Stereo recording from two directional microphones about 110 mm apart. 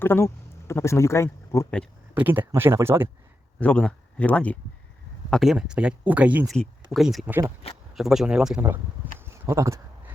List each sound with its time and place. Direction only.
0.0 s speech: 20° left (ahead or behind)
2.1 s speech: 15° right (ahead or behind)
3.6 s speech: 10° left (ahead or behind)
5.3 s speech: centre (ahead or behind)
6.5 s speech: centre (ahead or behind)
8.6 s speech: 20° right (ahead or behind)